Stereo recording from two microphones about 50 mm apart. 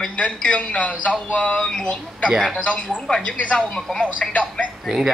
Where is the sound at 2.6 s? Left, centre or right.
Left.